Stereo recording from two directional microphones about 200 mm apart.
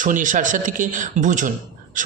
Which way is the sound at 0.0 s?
40° right (ahead or behind).